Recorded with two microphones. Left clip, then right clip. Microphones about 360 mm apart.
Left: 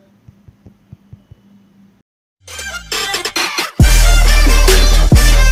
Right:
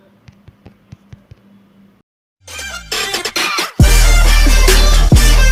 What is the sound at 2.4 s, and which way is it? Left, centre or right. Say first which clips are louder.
Music: even; centre.